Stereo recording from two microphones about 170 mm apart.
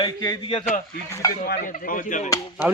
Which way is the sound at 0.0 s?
25° left (ahead or behind).